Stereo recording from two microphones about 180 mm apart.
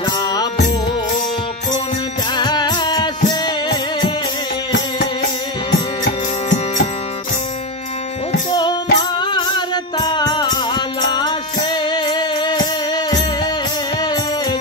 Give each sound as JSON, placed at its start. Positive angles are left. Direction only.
{"t": 0.0, "sound": "music", "side_deg": 25}
{"t": 2.3, "sound": "music", "side_deg": 25}
{"t": 8.5, "sound": "music", "side_deg": 25}